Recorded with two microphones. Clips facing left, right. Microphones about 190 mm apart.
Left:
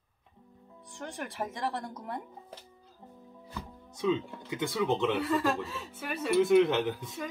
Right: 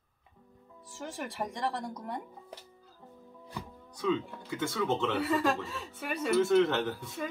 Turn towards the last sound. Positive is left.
turn(degrees=15)  # may be behind; listen again after turning